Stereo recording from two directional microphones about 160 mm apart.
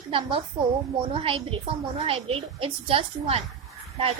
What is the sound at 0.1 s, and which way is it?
A woman's voice, 35° right (ahead or behind).